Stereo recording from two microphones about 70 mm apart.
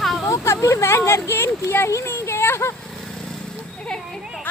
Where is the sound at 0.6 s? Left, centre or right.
Left.